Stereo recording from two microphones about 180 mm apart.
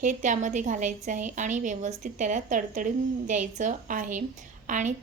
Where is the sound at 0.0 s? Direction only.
45° right (ahead or behind).